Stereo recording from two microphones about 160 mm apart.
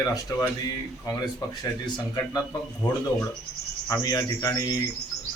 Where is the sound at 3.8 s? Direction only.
20° left (ahead or behind).